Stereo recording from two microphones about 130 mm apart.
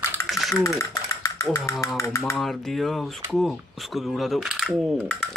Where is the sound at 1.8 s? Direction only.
25° left (ahead or behind).